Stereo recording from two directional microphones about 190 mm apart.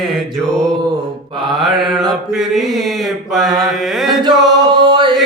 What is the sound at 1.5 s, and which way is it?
Mantra, centre (ahead or behind).